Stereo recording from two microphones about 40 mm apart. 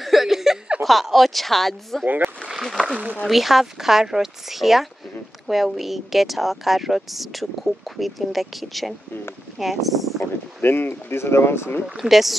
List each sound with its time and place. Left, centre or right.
0.0 s a sound: centre
0.8 s speech: centre
2.0 s speech: right
2.6 s speech: centre
10.6 s speech: left
12.0 s speech: centre